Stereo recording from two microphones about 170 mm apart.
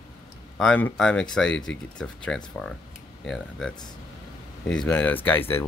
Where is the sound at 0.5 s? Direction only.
5° left (ahead or behind).